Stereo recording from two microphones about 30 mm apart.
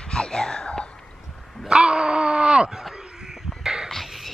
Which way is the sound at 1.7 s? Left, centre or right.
Right.